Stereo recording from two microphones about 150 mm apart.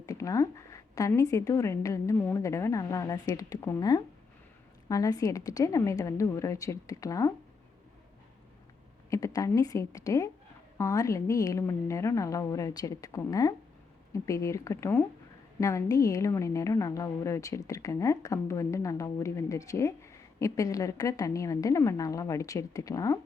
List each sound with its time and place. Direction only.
0.0 s a woman's voice: 20° left (ahead or behind)
9.0 s a woman's voice: 20° left (ahead or behind)